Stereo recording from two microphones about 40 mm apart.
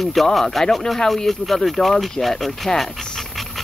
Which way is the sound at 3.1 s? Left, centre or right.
Centre.